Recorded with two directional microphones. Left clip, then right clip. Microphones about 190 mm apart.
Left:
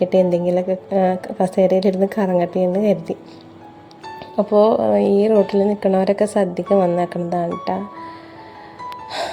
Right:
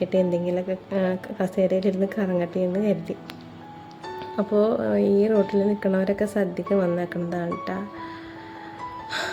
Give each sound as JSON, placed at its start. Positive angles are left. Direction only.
{"t": 0.0, "sound": "a woman's voice", "side_deg": 20}
{"t": 4.8, "sound": "a woman's voice", "side_deg": 20}
{"t": 9.0, "sound": "music", "side_deg": 15}